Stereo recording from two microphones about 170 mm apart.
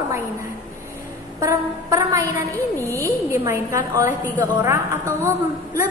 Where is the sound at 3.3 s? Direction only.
15° right (ahead or behind).